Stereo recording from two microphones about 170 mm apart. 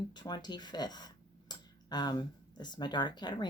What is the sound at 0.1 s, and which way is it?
Speech, 25° left (ahead or behind).